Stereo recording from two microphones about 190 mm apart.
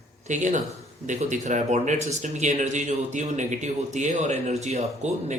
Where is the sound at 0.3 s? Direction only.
40° right (ahead or behind).